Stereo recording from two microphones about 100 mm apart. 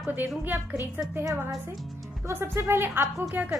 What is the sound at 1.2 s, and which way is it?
A woman's voice, 35° right (ahead or behind).